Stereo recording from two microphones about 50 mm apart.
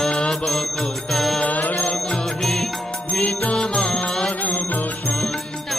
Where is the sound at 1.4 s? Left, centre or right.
Left.